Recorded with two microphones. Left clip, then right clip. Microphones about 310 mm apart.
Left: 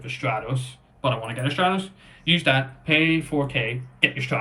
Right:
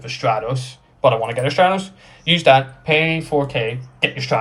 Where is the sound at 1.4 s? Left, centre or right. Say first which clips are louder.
Right 7 dB; centre.